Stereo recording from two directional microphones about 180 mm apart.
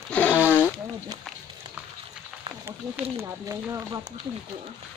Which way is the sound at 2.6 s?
15° right (ahead or behind).